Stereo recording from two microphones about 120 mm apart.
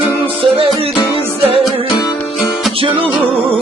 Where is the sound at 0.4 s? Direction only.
50° right (ahead or behind).